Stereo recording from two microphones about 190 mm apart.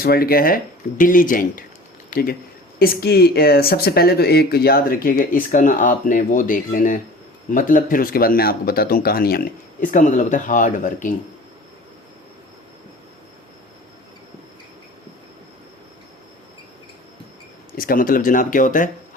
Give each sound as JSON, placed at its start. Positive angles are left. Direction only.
{"t": 0.0, "sound": "speech", "side_deg": 50}
{"t": 17.7, "sound": "speech", "side_deg": 50}